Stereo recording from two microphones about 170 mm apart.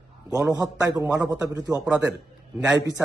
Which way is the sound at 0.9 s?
20° right (ahead or behind).